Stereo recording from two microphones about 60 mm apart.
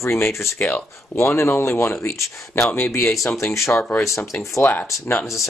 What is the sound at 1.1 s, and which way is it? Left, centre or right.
Speech, left.